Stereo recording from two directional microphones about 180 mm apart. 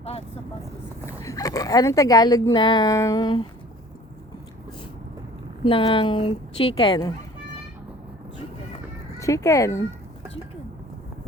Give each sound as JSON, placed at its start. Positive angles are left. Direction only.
{"t": 0.0, "sound": "speech", "side_deg": 35}
{"t": 1.0, "sound": "speech", "side_deg": 15}
{"t": 5.6, "sound": "speech", "side_deg": 30}
{"t": 9.1, "sound": "speech", "side_deg": 15}